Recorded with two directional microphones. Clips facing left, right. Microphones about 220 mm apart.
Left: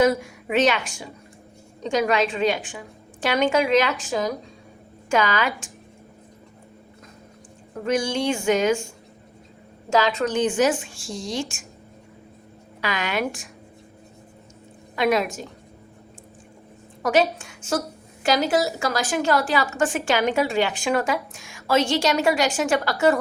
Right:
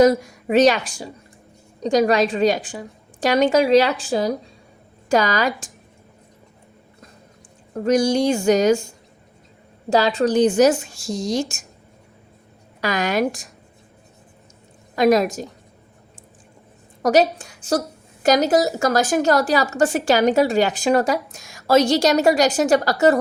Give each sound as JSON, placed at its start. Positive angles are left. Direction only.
{"t": 0.0, "sound": "a woman's voice", "side_deg": -40}
{"t": 7.7, "sound": "a woman's voice", "side_deg": -40}
{"t": 9.9, "sound": "a woman's voice", "side_deg": -35}
{"t": 12.8, "sound": "a woman's voice", "side_deg": -40}
{"t": 14.9, "sound": "a woman's voice", "side_deg": -40}
{"t": 17.0, "sound": "a woman's voice", "side_deg": -40}